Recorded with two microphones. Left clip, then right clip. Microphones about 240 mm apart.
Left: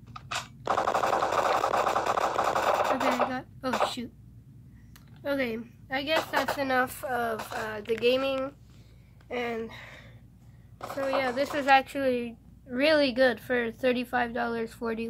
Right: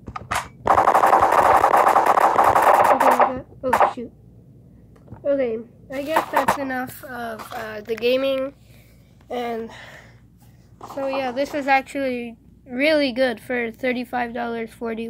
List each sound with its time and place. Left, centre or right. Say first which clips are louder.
0.0 s machine gun: right 10 dB; right
3.7 s throat clearing: right 11 dB; centre
6.1 s speech: right 9 dB; centre
6.6 s speech: even; centre
7.1 s speech: left 1 dB; centre
11.0 s a woman's voice: right 4 dB; centre